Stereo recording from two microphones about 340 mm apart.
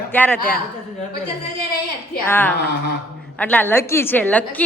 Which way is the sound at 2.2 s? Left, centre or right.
Centre.